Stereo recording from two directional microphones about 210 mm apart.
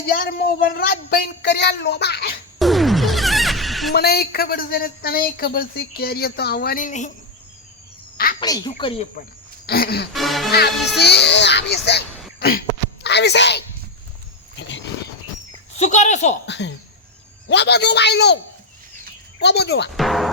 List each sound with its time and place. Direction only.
0.1 s speech: 45° left (ahead or behind)
2.6 s music: centre (ahead or behind)
3.9 s speech: 50° left (ahead or behind)
8.4 s a woman's voice: 20° left (ahead or behind)
9.2 s speech: 45° left (ahead or behind)
10.1 s speech: centre (ahead or behind)
10.8 s a child's voice: 50° left (ahead or behind)
14.5 s cricket: 55° left (ahead or behind)
15.8 s speech: 35° left (ahead or behind)
16.5 s a child's voice: 55° left (ahead or behind)
19.4 s speech: 55° left (ahead or behind)
20.0 s speech: centre (ahead or behind)